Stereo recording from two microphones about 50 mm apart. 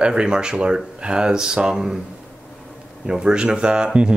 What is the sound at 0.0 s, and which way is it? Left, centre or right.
Speech, centre.